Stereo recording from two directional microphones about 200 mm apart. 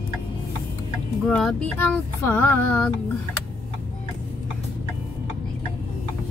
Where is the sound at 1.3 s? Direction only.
5° left (ahead or behind).